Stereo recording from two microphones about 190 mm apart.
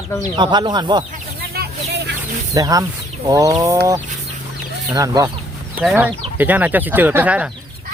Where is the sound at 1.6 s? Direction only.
50° right (ahead or behind).